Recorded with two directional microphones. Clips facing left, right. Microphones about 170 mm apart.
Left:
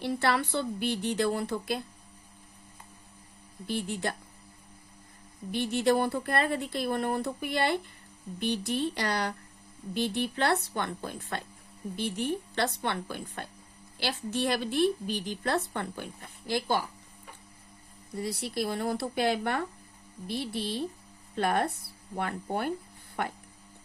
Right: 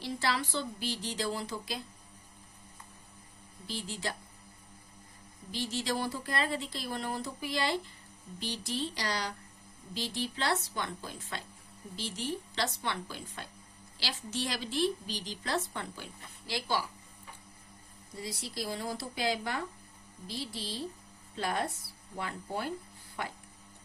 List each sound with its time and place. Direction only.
0.0 s speech: 60° left (ahead or behind)
3.7 s speech: 60° left (ahead or behind)
5.5 s a woman's voice: 60° left (ahead or behind)
18.2 s speech: 60° left (ahead or behind)